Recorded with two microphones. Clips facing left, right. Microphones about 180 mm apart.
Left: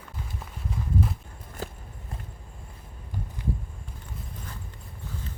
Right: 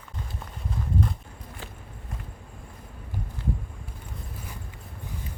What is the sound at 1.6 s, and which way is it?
Walk, 40° left (ahead or behind).